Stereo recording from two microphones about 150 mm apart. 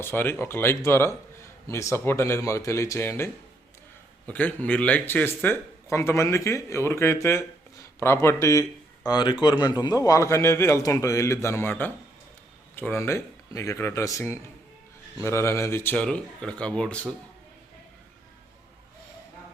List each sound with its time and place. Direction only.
0.0 s speech: 15° left (ahead or behind)
4.3 s speech: 10° left (ahead or behind)